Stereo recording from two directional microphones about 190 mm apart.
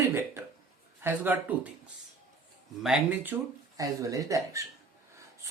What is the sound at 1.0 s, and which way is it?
Speech, 10° right (ahead or behind).